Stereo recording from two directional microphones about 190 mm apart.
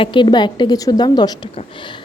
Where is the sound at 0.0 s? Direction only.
25° left (ahead or behind).